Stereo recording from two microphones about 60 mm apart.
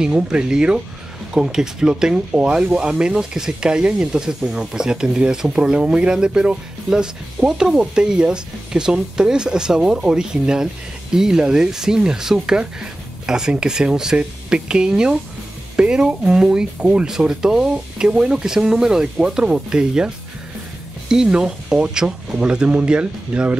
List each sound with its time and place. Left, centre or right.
0.0 s speech: centre
21.1 s speech: centre